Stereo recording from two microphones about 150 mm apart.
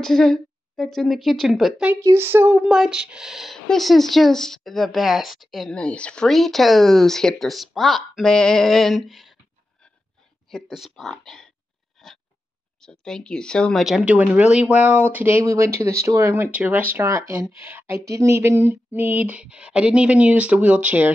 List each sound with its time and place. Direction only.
0.0 s speech: 5° left (ahead or behind)
2.0 s speech: 15° right (ahead or behind)
2.7 s speech: 5° right (ahead or behind)
10.5 s speech: centre (ahead or behind)
12.0 s a sound: centre (ahead or behind)
12.8 s speech: 5° left (ahead or behind)